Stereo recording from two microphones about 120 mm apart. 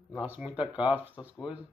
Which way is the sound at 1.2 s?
35° left (ahead or behind).